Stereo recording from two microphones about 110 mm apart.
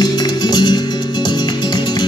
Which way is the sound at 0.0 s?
40° left (ahead or behind).